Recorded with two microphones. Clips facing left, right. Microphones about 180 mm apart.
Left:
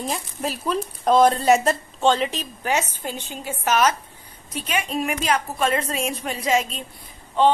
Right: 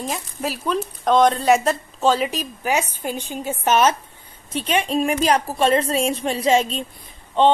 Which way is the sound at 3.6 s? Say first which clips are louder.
Right 2 dB; 25° right (ahead or behind).